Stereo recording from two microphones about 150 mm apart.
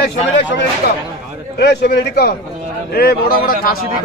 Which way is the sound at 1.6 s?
90° left.